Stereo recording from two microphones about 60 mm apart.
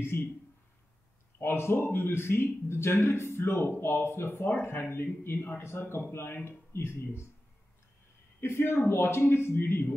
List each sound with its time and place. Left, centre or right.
0.1 s speech: left
1.4 s speech: left
8.4 s speech: left